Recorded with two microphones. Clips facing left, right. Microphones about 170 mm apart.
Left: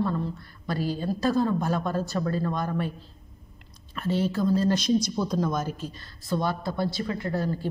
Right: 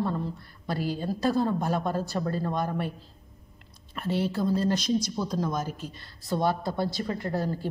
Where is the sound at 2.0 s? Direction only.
30° right (ahead or behind).